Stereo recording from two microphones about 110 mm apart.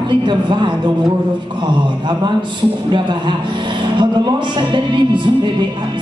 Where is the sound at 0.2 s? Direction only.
45° right (ahead or behind).